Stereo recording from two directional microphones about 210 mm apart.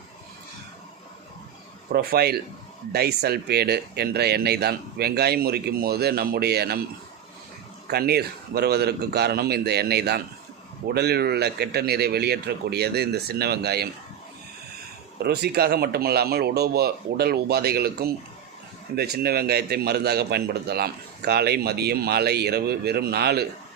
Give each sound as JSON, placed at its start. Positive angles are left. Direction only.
{"t": 1.9, "sound": "a man's voice", "side_deg": -50}
{"t": 7.9, "sound": "a man's voice", "side_deg": -50}
{"t": 15.2, "sound": "a man's voice", "side_deg": -50}